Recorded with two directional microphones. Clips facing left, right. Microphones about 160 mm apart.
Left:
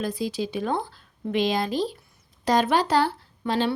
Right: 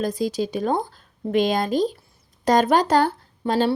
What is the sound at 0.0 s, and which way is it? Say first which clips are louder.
Speech: right 4 dB; 40° right (ahead or behind).